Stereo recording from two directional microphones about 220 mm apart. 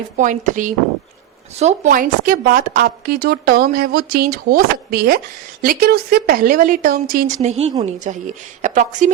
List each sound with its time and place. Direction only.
0.2 s a woman's voice: 35° right (ahead or behind)